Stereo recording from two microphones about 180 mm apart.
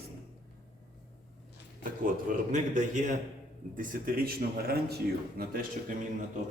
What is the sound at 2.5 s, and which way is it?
A man's voice, 45° right (ahead or behind).